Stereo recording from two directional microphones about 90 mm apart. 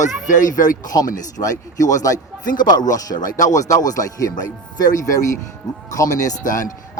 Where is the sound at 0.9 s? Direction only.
40° left (ahead or behind).